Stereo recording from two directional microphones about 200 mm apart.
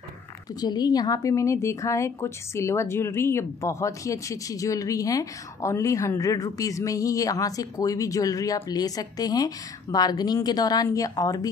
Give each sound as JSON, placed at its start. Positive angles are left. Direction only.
{"t": 0.6, "sound": "a woman's voice", "side_deg": 20}